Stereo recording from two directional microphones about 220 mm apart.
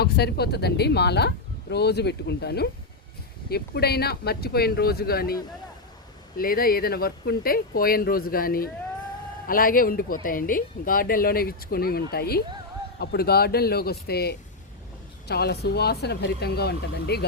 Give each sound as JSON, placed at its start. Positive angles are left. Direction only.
{"t": 0.0, "sound": "speech", "side_deg": 45}